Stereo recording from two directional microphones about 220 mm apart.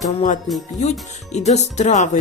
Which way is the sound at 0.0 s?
35° left (ahead or behind).